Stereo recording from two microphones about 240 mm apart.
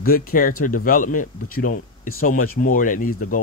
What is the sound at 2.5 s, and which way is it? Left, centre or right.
Speech, left.